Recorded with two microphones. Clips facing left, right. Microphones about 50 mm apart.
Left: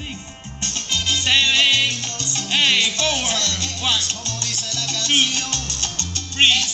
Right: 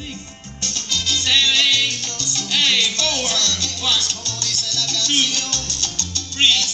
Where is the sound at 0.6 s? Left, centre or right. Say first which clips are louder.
Left 1 dB; left.